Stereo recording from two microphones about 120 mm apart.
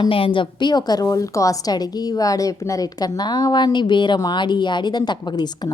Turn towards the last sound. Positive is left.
turn(degrees=35)  # may be behind; listen again after turning